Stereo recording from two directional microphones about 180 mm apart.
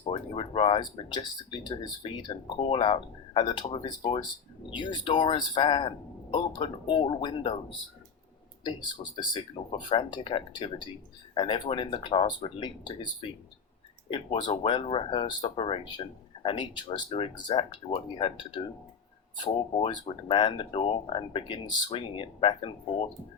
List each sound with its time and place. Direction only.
0.0 s speech: 30° left (ahead or behind)
9.3 s speech: 25° left (ahead or behind)
14.1 s speech: 30° left (ahead or behind)